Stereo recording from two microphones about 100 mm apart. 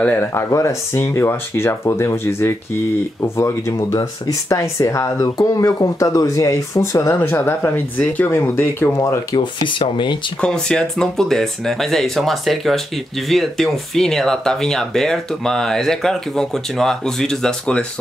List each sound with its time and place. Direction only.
0.0 s speech: 20° left (ahead or behind)
9.4 s speech: 55° left (ahead or behind)
10.4 s speech: 10° left (ahead or behind)